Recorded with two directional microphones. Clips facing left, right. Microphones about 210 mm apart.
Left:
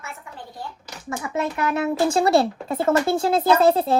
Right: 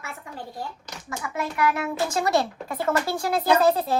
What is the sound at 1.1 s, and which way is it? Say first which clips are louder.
Speech: left 5 dB; 25° left (ahead or behind).